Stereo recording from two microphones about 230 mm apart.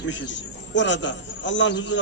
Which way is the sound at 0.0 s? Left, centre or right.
Left.